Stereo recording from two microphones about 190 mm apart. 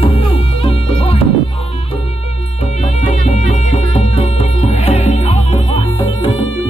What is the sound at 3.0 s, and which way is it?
Music, 35° left (ahead or behind).